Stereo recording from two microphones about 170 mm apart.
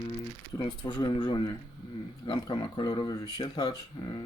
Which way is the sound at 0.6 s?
25° left (ahead or behind).